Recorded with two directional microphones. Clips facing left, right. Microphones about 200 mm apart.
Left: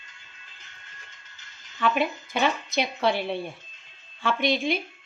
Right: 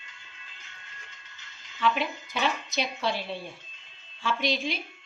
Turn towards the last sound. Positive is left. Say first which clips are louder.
# left 4 dB
turn(degrees=55)  # may be behind; listen again after turning